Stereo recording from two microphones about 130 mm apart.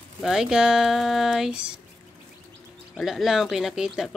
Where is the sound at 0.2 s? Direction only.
5° right (ahead or behind).